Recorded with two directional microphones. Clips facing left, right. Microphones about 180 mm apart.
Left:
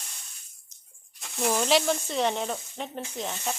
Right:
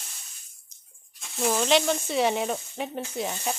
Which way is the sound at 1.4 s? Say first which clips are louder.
Right 1 dB; centre (ahead or behind).